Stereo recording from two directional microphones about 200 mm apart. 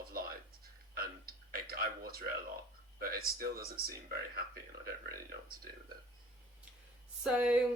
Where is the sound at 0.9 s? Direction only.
50° right (ahead or behind).